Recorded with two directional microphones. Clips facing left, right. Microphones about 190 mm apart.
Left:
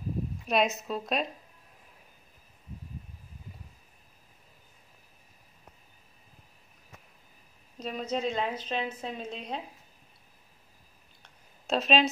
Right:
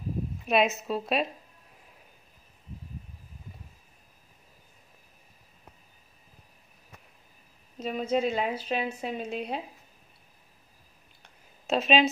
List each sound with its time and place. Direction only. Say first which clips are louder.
0.5 s a woman's voice: right 3 dB; 5° right (ahead or behind)
7.8 s a woman's voice: right 4 dB; 5° right (ahead or behind)
11.2 s a sound: right 3 dB; centre (ahead or behind)